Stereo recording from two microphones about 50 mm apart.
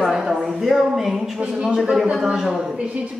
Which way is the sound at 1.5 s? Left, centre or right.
Centre.